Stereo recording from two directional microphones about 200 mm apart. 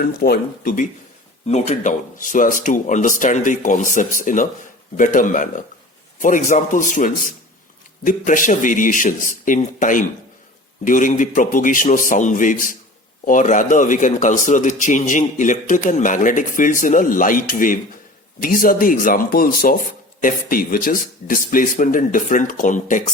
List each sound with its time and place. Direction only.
0.0 s speech: 50° left (ahead or behind)
1.5 s a man's voice: 35° left (ahead or behind)